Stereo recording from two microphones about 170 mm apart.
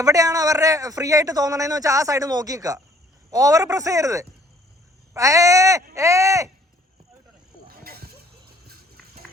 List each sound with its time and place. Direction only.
0.0 s speech: 20° right (ahead or behind)